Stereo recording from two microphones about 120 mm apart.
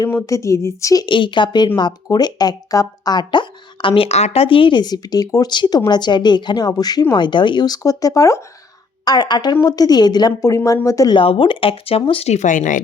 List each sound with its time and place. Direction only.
0.1 s a woman's voice: 25° left (ahead or behind)
1.0 s speech: 40° left (ahead or behind); by 11.1 s 25° left (ahead or behind)
11.1 s speech: 45° left (ahead or behind); by 12.8 s 90° left